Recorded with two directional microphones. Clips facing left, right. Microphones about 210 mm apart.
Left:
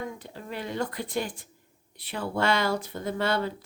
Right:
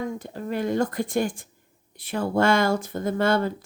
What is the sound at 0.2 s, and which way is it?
A woman's voice, 45° right (ahead or behind).